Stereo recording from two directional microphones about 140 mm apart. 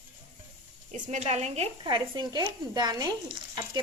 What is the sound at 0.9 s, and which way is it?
Speech, 55° right (ahead or behind).